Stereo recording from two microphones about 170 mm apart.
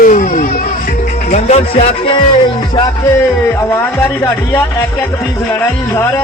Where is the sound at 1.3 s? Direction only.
40° left (ahead or behind).